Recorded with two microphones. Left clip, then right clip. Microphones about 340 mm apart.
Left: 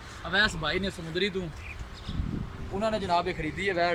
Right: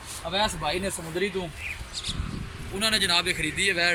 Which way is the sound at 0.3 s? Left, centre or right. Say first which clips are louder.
Even; centre.